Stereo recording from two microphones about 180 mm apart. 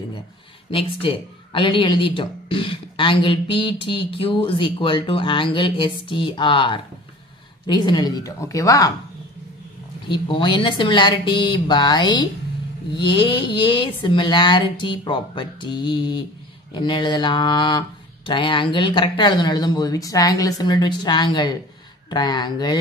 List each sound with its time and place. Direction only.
0.7 s speech: 30° left (ahead or behind)
10.0 s speech: 25° left (ahead or behind)